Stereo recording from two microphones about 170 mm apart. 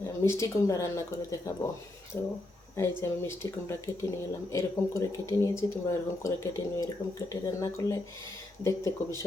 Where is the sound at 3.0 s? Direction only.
15° left (ahead or behind).